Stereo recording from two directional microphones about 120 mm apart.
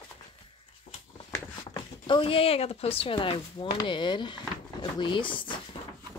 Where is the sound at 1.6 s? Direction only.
40° left (ahead or behind).